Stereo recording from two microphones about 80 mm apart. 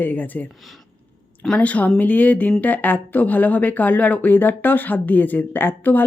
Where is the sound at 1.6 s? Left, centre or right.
Centre.